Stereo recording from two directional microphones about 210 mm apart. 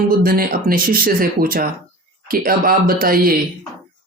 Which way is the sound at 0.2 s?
45° right (ahead or behind).